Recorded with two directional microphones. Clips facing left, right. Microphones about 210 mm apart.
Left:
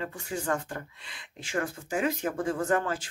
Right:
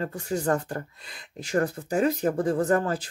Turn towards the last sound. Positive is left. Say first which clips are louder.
# right 4 dB
turn(degrees=-35)  # may be behind; listen again after turning